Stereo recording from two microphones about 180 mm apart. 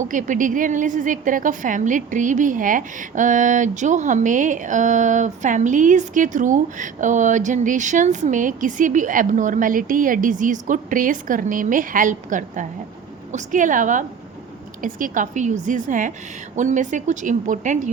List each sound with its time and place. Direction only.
0.0 s a woman's voice: 45° right (ahead or behind)